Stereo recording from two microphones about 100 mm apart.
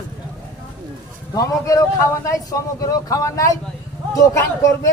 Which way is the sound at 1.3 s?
35° left (ahead or behind).